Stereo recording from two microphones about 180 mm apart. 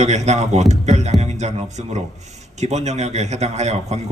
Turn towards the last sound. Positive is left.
turn(degrees=-40)  # may be behind; listen again after turning